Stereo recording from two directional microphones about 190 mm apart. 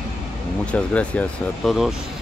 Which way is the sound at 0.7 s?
5° left (ahead or behind).